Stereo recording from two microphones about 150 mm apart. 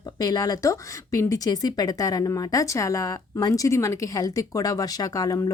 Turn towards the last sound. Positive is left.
turn(degrees=25)  # may be behind; listen again after turning